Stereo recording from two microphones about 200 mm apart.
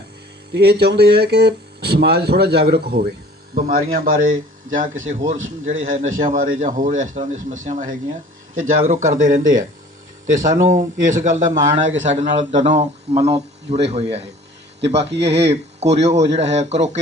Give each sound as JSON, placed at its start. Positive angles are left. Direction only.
{"t": 0.5, "sound": "speech", "side_deg": -55}
{"t": 11.9, "sound": "speech", "side_deg": -70}
{"t": 12.1, "sound": "speech", "side_deg": -35}